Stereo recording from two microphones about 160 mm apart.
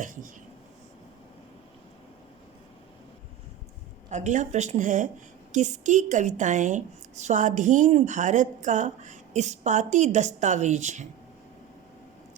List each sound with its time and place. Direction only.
0.0 s a woman's voice: 55° right (ahead or behind)
4.1 s a woman's voice: 45° right (ahead or behind)